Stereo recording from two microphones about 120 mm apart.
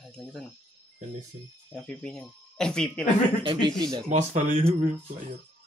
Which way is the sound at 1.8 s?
5° left (ahead or behind).